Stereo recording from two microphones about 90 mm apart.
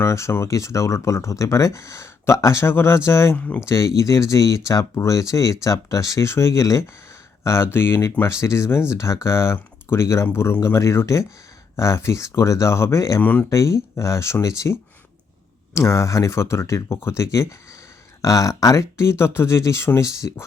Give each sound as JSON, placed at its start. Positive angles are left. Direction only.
{"t": 0.0, "sound": "speech", "side_deg": 30}
{"t": 3.3, "sound": "speech", "side_deg": 15}
{"t": 3.7, "sound": "speech", "side_deg": 35}